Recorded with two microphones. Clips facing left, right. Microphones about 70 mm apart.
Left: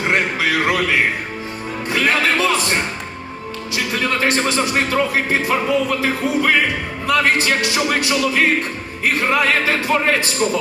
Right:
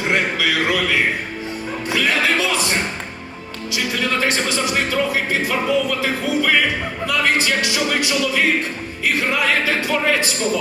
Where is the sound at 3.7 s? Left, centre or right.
Left.